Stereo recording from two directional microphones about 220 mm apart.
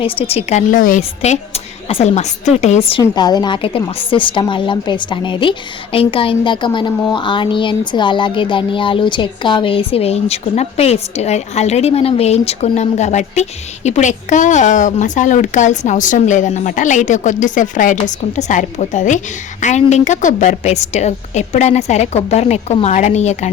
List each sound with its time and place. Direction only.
0.0 s a woman's voice: 25° left (ahead or behind)
3.0 s a woman's voice: 20° left (ahead or behind)